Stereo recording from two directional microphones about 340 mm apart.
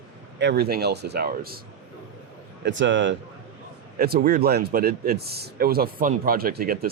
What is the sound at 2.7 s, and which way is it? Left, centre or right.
Speech, right.